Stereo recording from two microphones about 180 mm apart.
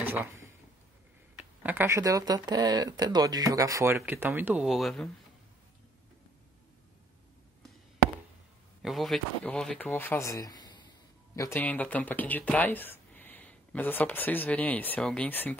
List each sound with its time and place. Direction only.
0.0 s a sound: 10° right (ahead or behind)
1.6 s speech: 10° right (ahead or behind)
8.8 s speech: centre (ahead or behind)